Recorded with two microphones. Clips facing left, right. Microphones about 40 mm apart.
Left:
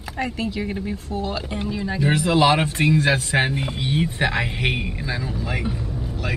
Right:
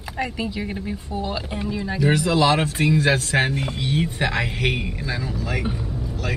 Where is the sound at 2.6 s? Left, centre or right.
Centre.